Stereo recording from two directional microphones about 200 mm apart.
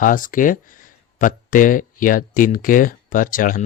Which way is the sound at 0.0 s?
40° left (ahead or behind).